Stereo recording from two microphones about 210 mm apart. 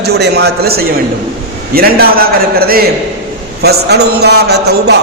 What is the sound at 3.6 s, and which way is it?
A man's voice, 50° right (ahead or behind).